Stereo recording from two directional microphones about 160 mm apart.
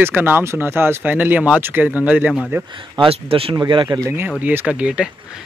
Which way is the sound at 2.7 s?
30° right (ahead or behind).